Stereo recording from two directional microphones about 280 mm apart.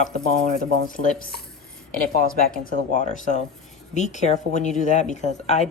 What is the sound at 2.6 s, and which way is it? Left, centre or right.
Speech, left.